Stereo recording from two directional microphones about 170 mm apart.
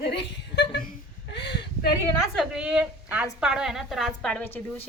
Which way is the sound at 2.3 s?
5° right (ahead or behind).